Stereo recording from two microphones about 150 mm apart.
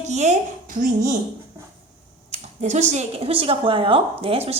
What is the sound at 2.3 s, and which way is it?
Speech, 50° right (ahead or behind).